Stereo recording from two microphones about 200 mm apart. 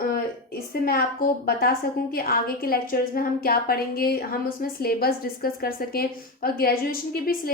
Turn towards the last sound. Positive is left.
turn(degrees=50)  # may be behind; listen again after turning